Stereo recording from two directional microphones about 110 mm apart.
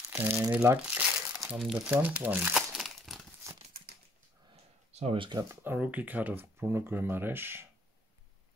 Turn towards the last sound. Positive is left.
turn(degrees=-20)  # may be behind; listen again after turning